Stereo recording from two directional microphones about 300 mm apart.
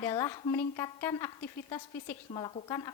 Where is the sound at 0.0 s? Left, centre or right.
Centre.